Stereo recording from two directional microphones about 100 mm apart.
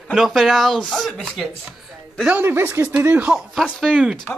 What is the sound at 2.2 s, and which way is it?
Speech, 20° right (ahead or behind).